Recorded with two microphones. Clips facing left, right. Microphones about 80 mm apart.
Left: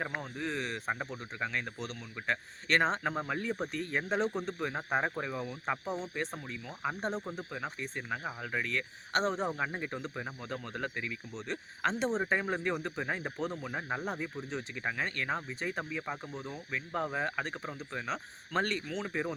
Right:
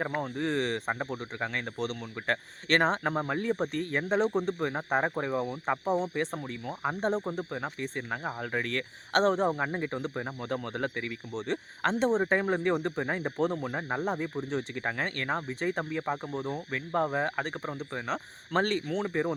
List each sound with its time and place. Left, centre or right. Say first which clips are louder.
0.0 s speech: right 6 dB; right
0.9 s speech: right 4 dB; right
9.5 s speech: right 5 dB; right